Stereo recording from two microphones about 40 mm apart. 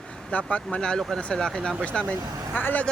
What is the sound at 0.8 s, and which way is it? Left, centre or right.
Speech, centre.